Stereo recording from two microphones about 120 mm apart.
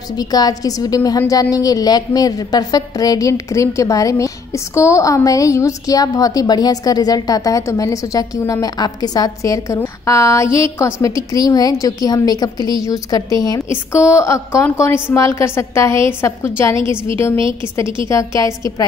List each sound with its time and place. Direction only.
0.2 s a woman's voice: 30° left (ahead or behind)
18.0 s a woman's voice: 25° left (ahead or behind)